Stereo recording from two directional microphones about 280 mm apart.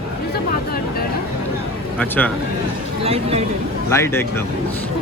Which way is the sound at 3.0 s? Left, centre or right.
Right.